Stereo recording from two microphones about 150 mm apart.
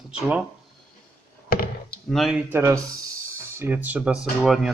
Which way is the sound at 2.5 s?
15° right (ahead or behind).